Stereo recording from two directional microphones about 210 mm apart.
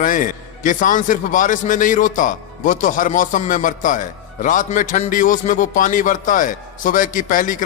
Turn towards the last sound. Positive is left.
turn(degrees=40)  # may be behind; listen again after turning